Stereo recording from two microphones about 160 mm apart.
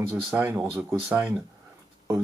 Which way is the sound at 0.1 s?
10° right (ahead or behind).